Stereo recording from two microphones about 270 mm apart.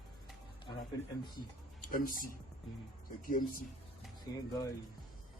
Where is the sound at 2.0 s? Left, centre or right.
Left.